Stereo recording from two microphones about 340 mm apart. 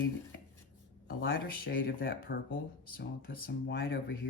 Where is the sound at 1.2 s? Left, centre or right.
Left.